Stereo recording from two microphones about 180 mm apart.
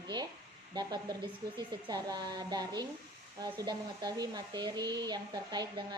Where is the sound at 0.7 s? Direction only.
20° right (ahead or behind).